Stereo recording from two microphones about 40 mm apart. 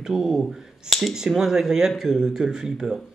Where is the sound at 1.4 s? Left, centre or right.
Centre.